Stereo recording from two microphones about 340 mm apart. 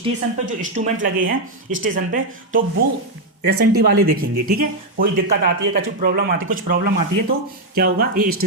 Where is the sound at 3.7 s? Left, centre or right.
Right.